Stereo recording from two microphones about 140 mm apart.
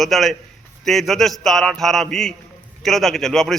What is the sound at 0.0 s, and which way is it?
A man's voice, centre (ahead or behind).